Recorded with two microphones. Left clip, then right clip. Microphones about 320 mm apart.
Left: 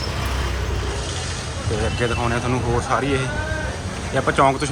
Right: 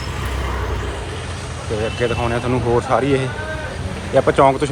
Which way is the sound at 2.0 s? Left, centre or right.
Centre.